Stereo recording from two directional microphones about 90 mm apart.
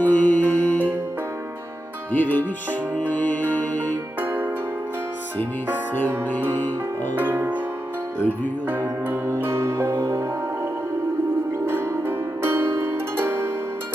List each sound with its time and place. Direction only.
0.0 s music: 20° left (ahead or behind)
2.1 s speech: 20° left (ahead or behind)
3.0 s music: 20° left (ahead or behind)
4.2 s music: 25° right (ahead or behind)
7.2 s music: 20° right (ahead or behind)
8.8 s music: 30° right (ahead or behind)
11.6 s music: 25° right (ahead or behind)